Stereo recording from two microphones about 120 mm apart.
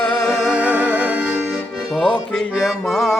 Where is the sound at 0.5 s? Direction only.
10° right (ahead or behind).